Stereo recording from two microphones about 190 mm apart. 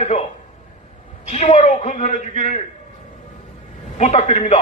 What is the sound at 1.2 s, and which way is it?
A man's voice, 35° left (ahead or behind).